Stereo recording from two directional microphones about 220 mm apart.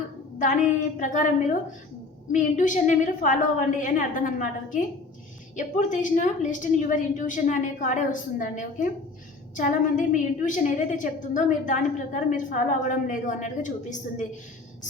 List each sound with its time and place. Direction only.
0.3 s a woman's voice: 35° left (ahead or behind)